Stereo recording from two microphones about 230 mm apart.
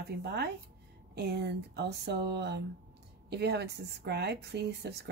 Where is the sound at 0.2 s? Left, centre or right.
Right.